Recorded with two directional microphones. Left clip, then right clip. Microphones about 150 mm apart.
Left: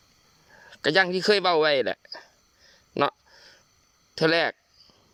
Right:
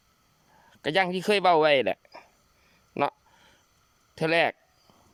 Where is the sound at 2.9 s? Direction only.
5° right (ahead or behind).